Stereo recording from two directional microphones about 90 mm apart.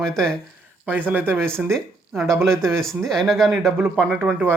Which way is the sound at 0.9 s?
20° right (ahead or behind).